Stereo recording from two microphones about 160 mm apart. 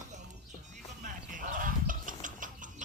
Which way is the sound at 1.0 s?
55° right (ahead or behind).